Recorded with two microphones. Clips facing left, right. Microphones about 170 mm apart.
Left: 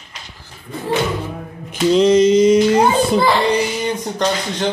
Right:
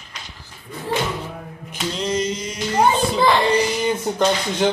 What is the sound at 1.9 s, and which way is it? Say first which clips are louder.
Mantra: left 13 dB; 90° left.